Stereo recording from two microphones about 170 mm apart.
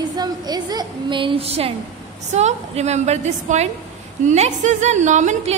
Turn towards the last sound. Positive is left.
turn(degrees=-45)  # may be behind; listen again after turning